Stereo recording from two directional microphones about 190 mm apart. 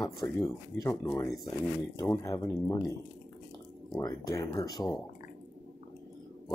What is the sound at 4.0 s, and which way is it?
Speech, 15° left (ahead or behind).